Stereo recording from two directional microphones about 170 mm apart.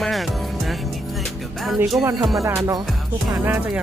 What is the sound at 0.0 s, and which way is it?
Music, centre (ahead or behind).